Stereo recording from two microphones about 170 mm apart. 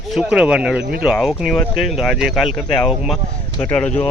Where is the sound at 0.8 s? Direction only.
65° right (ahead or behind).